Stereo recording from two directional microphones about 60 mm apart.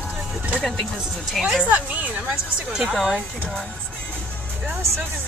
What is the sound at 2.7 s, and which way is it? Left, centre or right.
Speech, centre.